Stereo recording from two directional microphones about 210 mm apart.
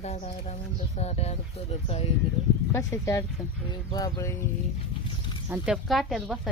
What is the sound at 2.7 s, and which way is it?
Speech, 15° left (ahead or behind).